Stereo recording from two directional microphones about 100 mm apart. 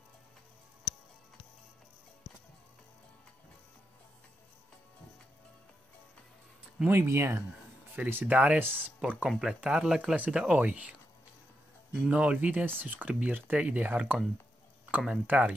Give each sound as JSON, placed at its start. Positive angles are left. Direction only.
{"t": 6.9, "sound": "speech", "side_deg": -25}
{"t": 12.1, "sound": "speech", "side_deg": -10}